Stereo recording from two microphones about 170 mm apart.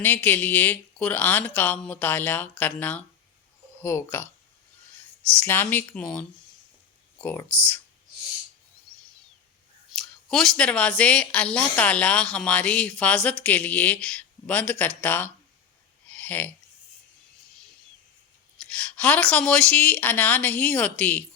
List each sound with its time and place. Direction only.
0.0 s a woman's voice: 10° left (ahead or behind)
5.4 s a woman's voice: 10° left (ahead or behind)
10.0 s a woman's voice: centre (ahead or behind)
16.0 s a sound: 10° left (ahead or behind)
18.7 s a woman's voice: 5° left (ahead or behind)